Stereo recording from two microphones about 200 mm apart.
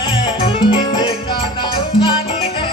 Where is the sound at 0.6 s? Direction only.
25° left (ahead or behind).